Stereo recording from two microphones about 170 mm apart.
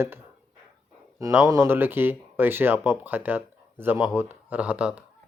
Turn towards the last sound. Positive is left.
turn(degrees=-5)  # may be behind; listen again after turning